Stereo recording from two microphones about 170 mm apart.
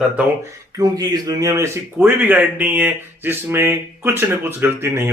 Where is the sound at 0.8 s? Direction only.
20° right (ahead or behind).